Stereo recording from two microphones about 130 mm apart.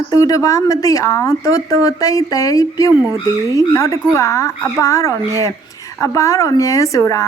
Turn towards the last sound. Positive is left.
turn(degrees=25)  # may be behind; listen again after turning